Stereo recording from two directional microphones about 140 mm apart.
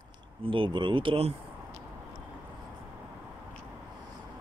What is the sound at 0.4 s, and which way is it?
Speech, 35° right (ahead or behind).